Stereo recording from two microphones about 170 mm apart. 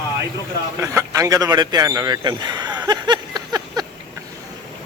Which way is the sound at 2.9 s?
25° right (ahead or behind).